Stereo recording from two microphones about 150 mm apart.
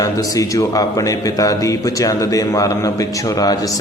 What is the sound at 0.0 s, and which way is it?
A man's voice, 20° left (ahead or behind).